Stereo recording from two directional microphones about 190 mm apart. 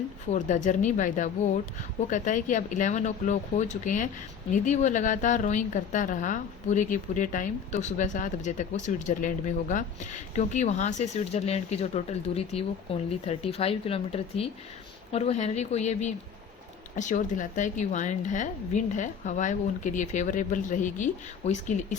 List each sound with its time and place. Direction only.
0.3 s speech: 40° left (ahead or behind)